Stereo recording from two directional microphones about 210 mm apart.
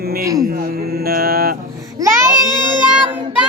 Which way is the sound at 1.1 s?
45° right (ahead or behind).